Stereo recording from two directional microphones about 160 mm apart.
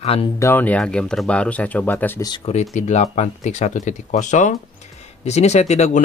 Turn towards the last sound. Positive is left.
turn(degrees=45)  # may be behind; listen again after turning